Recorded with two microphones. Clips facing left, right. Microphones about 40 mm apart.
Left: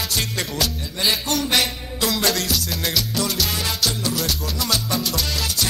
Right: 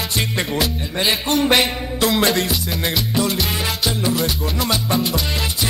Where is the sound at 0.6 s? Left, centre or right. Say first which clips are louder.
Right 3 dB; right.